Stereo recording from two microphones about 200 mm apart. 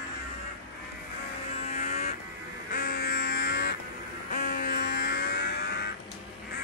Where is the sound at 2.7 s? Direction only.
50° left (ahead or behind).